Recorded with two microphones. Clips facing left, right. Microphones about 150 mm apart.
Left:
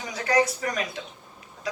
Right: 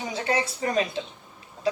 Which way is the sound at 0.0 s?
25° right (ahead or behind).